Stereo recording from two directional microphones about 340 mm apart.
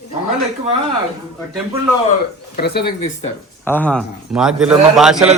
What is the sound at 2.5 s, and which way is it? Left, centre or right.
Speech, left.